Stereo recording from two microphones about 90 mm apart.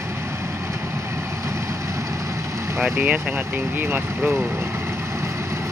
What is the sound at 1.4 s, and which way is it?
Vehicle, 35° right (ahead or behind).